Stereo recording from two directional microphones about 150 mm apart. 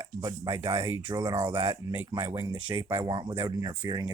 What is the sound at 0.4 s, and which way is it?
Speech, 40° right (ahead or behind).